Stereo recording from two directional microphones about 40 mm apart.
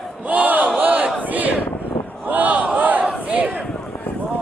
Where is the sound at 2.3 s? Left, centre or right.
Right.